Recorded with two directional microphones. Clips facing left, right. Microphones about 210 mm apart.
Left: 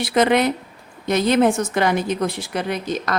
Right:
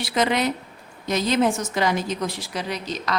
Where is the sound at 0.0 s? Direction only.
55° left (ahead or behind).